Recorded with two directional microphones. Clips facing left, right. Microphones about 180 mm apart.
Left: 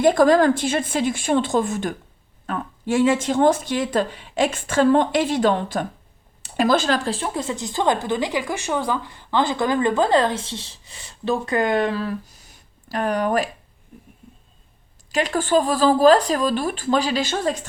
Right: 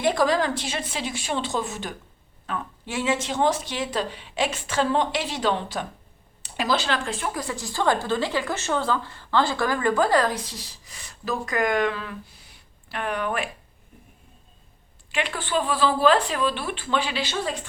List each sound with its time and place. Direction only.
0.0 s a woman's voice: 50° left (ahead or behind)
15.1 s speech: 40° left (ahead or behind)